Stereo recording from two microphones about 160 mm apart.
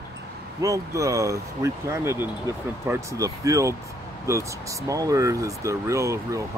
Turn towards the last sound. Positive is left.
turn(degrees=-20)  # may be behind; listen again after turning